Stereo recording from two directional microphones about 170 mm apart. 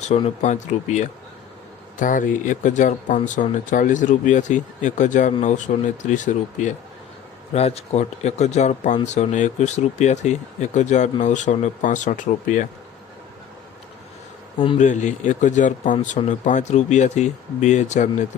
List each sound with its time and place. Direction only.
0.0 s speech: 45° left (ahead or behind)
14.8 s speech: 45° left (ahead or behind)